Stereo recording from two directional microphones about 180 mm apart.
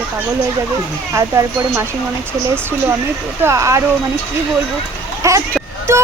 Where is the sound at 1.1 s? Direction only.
15° right (ahead or behind).